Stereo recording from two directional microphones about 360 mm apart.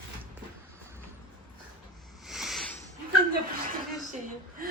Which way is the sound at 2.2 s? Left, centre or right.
Centre.